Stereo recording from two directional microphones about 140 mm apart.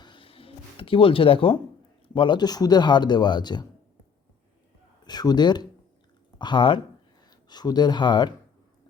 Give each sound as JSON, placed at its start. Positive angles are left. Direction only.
{"t": 0.0, "sound": "a sound", "side_deg": 35}
{"t": 2.1, "sound": "speech", "side_deg": 35}
{"t": 5.0, "sound": "speech", "side_deg": 30}